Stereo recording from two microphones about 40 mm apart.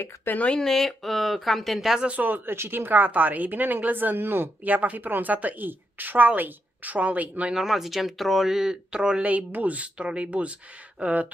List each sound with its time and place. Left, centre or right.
0.3 s speech: left
0.7 s speech: centre
2.2 s speech: right
3.1 s a woman's voice: right
4.6 s a woman's voice: right
7.5 s speech: centre
9.2 s speech: right
9.9 s speech: right